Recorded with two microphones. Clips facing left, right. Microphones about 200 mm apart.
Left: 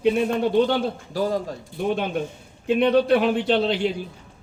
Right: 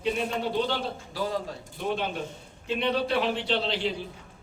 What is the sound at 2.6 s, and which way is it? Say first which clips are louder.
A man's voice: left 9 dB; 55° left (ahead or behind).